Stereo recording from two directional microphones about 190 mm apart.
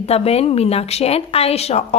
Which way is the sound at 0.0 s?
30° left (ahead or behind).